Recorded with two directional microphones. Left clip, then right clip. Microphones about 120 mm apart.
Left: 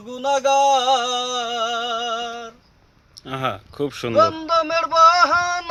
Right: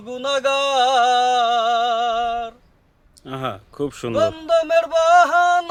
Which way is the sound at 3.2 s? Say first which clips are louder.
Left 2 dB; centre (ahead or behind).